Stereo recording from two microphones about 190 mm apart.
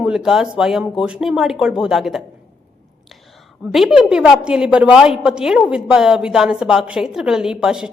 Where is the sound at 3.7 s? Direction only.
Centre (ahead or behind).